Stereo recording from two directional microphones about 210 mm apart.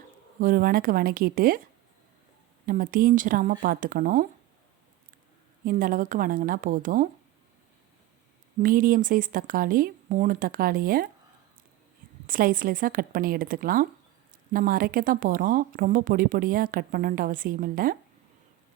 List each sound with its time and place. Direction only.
0.3 s a woman's voice: 45° right (ahead or behind)
2.6 s a woman's voice: 40° right (ahead or behind)
5.6 s a woman's voice: 40° right (ahead or behind)
8.5 s a woman's voice: 40° right (ahead or behind)
12.2 s a woman's voice: 40° right (ahead or behind)